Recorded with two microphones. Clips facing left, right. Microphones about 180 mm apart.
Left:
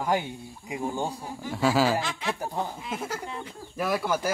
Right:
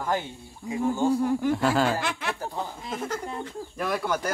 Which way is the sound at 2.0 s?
60° right (ahead or behind).